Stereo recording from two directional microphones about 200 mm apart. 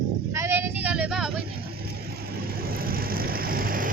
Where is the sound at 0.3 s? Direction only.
10° right (ahead or behind).